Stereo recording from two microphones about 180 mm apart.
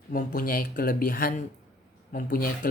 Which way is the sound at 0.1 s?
50° left (ahead or behind).